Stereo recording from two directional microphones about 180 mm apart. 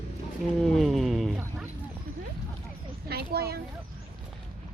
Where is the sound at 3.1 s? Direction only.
60° right (ahead or behind).